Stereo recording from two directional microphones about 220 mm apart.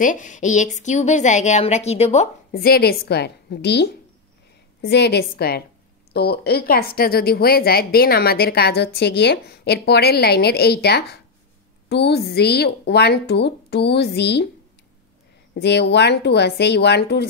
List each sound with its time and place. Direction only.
0.0 s a woman's voice: 35° left (ahead or behind)
2.5 s a woman's voice: 45° left (ahead or behind)
15.5 s a woman's voice: 50° left (ahead or behind)